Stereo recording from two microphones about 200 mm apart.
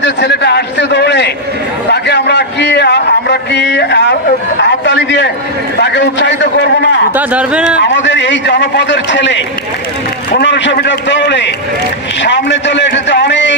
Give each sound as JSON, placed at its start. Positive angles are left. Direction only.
{"t": 0.0, "sound": "a man's voice", "side_deg": 60}
{"t": 7.2, "sound": "speech", "side_deg": -5}
{"t": 7.9, "sound": "a man's voice", "side_deg": 65}